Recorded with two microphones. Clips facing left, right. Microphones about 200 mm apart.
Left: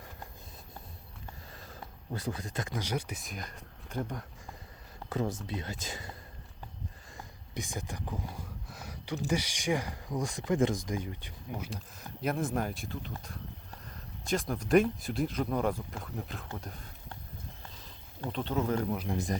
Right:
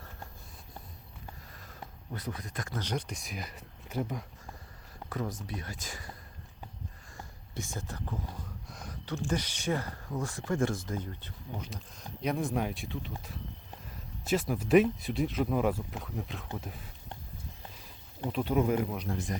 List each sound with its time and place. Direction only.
2.1 s speech: 30° left (ahead or behind)
2.7 s speech: 10° left (ahead or behind)
5.0 s speech: 25° left (ahead or behind)
7.5 s speech: 15° left (ahead or behind)
12.2 s speech: centre (ahead or behind)
17.7 s a sound: 10° right (ahead or behind)
19.1 s a man's voice: 15° left (ahead or behind)